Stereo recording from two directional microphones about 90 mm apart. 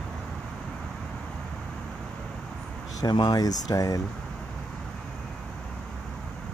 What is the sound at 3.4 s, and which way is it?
Speech, 40° left (ahead or behind).